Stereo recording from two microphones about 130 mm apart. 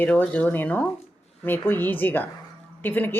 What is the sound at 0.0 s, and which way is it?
Speech, 10° left (ahead or behind).